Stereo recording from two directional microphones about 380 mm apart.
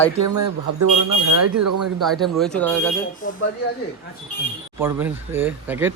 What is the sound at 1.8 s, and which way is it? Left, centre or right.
Speech, centre.